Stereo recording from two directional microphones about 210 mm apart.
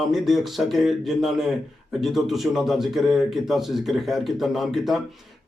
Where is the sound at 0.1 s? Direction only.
Centre (ahead or behind).